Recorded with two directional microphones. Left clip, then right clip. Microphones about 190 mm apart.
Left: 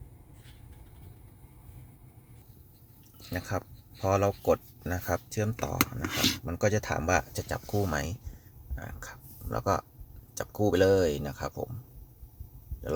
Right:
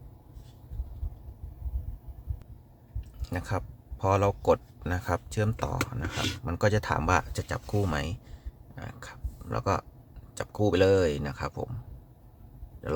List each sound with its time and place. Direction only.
3.2 s speech: 10° right (ahead or behind)
6.1 s speech: 55° left (ahead or behind)
6.4 s speech: 10° right (ahead or behind)
8.7 s a sound: 5° right (ahead or behind)
10.3 s speech: 5° right (ahead or behind)
12.8 s speech: 5° right (ahead or behind)